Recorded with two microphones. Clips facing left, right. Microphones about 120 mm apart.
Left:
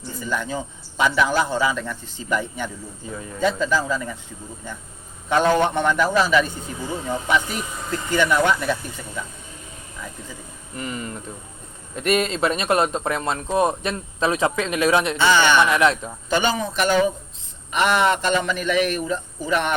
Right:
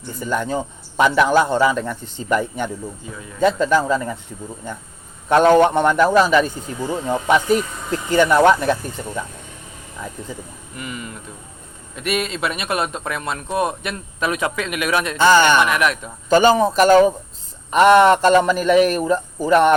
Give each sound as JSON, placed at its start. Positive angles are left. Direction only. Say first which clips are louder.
{"t": 0.2, "sound": "speech", "louder": "right 5 dB", "side_deg": -50}
{"t": 5.3, "sound": "speech", "louder": "right 6 dB", "side_deg": -55}
{"t": 10.8, "sound": "a man's voice", "louder": "left 2 dB", "side_deg": 35}
{"t": 15.2, "sound": "speech", "louder": "right 5 dB", "side_deg": -45}
{"t": 15.7, "sound": "speech", "louder": "left 1 dB", "side_deg": 25}
{"t": 16.3, "sound": "a man's voice", "louder": "right 8 dB", "side_deg": -40}